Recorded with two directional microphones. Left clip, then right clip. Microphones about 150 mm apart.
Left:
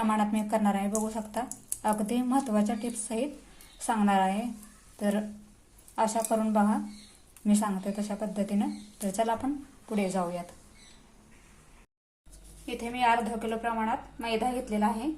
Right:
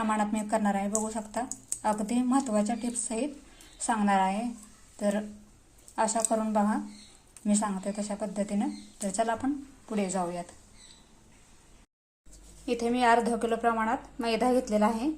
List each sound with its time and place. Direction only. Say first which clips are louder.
0.0 s speech: left 1 dB; centre (ahead or behind)
12.6 s a woman's voice: right 2 dB; 40° right (ahead or behind)